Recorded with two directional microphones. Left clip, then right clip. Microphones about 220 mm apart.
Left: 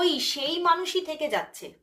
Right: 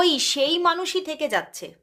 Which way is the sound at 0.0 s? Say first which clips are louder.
Right 5 dB; 45° right (ahead or behind).